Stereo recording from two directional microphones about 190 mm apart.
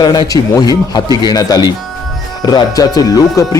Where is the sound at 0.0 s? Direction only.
20° left (ahead or behind).